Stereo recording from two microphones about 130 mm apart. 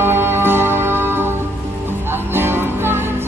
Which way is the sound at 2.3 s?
15° right (ahead or behind).